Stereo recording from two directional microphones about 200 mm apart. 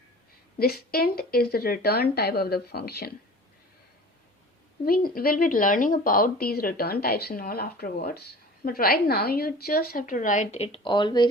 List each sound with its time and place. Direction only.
0.6 s a woman's voice: 50° left (ahead or behind)
4.9 s a woman's voice: 45° left (ahead or behind); by 11.3 s 20° left (ahead or behind)